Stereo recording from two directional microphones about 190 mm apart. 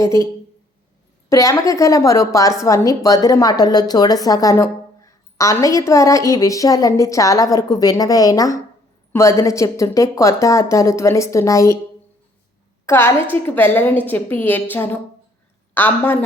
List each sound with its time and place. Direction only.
0.0 s a woman's voice: 15° left (ahead or behind)
1.3 s a woman's voice: 15° left (ahead or behind)
12.8 s a woman's voice: 15° left (ahead or behind)